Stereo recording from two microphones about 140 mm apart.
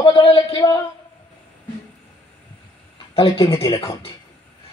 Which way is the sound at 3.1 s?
40° left (ahead or behind).